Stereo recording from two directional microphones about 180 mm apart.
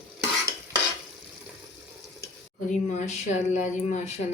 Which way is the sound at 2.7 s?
40° left (ahead or behind).